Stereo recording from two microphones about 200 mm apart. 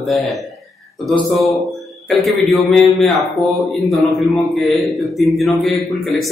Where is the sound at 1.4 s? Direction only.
Centre (ahead or behind).